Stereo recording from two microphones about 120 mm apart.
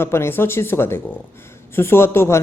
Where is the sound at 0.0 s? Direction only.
20° left (ahead or behind).